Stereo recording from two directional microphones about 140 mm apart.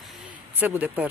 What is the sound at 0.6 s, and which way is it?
Speech, 15° right (ahead or behind).